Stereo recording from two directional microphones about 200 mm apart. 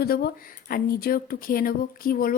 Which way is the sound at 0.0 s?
50° left (ahead or behind).